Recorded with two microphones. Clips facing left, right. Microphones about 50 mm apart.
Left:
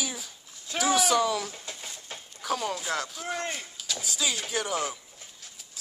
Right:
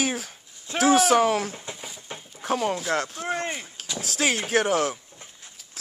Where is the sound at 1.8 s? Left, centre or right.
Centre.